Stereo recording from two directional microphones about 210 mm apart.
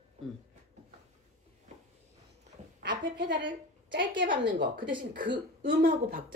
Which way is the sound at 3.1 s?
55° right (ahead or behind).